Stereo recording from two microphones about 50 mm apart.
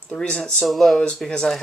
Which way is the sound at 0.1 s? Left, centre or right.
Centre.